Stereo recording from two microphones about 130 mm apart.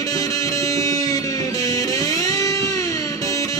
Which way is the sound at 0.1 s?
25° left (ahead or behind).